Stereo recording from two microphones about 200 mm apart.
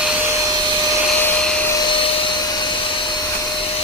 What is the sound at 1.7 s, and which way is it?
Vacuum cleaner, 25° left (ahead or behind).